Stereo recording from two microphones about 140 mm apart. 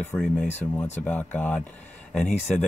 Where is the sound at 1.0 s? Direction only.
10° left (ahead or behind).